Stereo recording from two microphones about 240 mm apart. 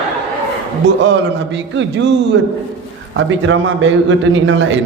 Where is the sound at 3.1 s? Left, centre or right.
Right.